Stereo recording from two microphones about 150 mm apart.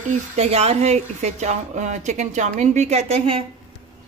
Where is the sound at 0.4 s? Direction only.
45° right (ahead or behind).